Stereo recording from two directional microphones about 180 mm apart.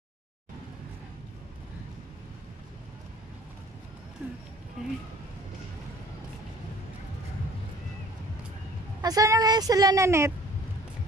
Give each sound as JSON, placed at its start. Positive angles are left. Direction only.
{"t": 9.0, "sound": "a woman's voice", "side_deg": -20}